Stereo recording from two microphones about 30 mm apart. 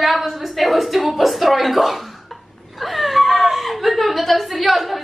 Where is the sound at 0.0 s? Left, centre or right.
Centre.